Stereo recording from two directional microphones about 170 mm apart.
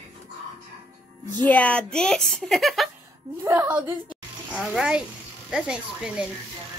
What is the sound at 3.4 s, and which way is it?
Speech, 20° right (ahead or behind).